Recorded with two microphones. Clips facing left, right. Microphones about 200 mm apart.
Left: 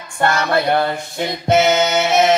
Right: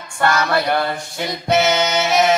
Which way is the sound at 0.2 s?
25° left (ahead or behind).